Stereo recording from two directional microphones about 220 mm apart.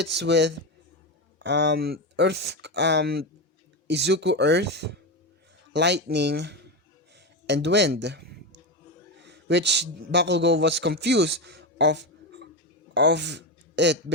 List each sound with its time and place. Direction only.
0.0 s a man's voice: 50° right (ahead or behind)